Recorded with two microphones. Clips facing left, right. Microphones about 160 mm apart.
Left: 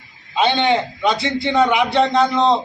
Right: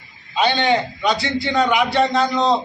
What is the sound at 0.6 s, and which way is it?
A man's voice, 20° left (ahead or behind).